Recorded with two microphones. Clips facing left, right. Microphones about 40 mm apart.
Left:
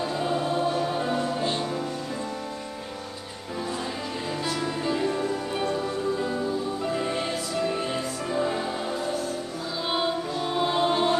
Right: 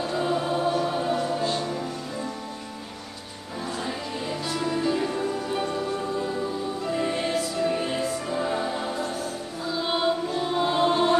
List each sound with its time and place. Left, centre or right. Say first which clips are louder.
0.1 s music: right 3 dB; centre
1.4 s music: right 1 dB; left
4.3 s music: right 1 dB; centre
6.9 s music: right 4 dB; centre